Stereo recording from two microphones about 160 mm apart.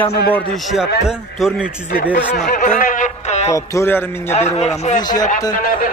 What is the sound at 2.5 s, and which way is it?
Speech, 55° left (ahead or behind).